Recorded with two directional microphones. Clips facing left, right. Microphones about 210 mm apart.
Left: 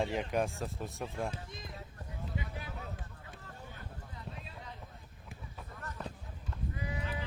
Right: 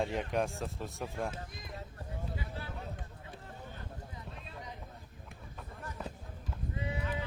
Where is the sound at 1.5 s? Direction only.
25° left (ahead or behind).